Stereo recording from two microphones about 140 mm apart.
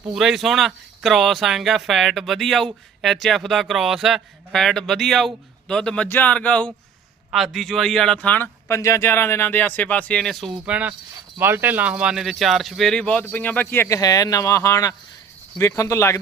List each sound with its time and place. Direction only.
0.1 s speech: centre (ahead or behind)
10.7 s speech: 10° right (ahead or behind); by 16.1 s 20° left (ahead or behind)